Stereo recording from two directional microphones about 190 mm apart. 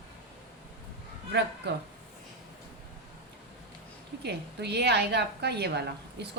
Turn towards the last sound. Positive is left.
turn(degrees=-60)  # may be behind; listen again after turning